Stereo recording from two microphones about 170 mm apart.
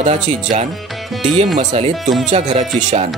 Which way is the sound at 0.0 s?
40° right (ahead or behind).